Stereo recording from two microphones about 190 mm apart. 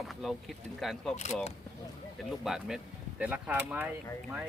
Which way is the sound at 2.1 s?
Centre (ahead or behind).